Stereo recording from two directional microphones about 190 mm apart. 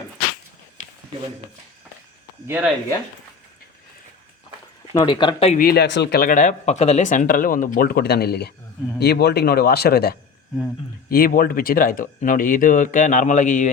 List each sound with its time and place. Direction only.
2.5 s speech: 5° right (ahead or behind)
4.9 s speech: 25° left (ahead or behind)
5.5 s speech: 55° left (ahead or behind)